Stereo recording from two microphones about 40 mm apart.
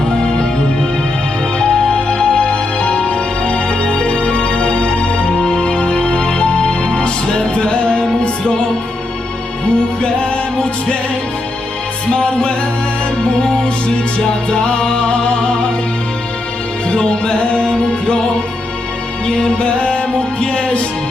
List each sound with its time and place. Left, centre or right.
1.5 s music: left
12.1 s music: left
16.9 s music: left
19.4 s music: left